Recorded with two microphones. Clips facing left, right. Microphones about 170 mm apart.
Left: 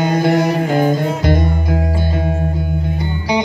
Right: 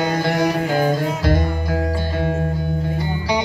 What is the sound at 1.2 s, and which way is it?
Music, 15° left (ahead or behind).